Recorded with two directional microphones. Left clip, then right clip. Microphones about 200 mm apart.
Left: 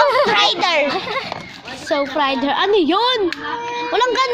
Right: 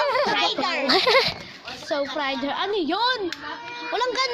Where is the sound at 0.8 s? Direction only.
55° right (ahead or behind).